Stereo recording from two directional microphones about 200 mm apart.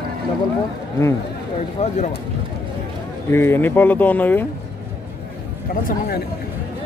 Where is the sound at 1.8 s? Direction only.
35° left (ahead or behind).